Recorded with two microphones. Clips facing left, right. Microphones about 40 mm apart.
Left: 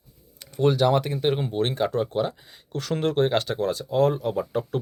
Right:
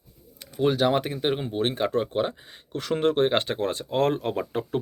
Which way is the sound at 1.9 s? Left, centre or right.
Right.